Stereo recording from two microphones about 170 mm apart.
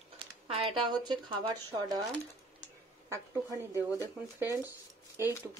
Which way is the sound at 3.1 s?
15° right (ahead or behind).